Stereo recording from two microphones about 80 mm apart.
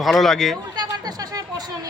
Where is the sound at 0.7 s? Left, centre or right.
Right.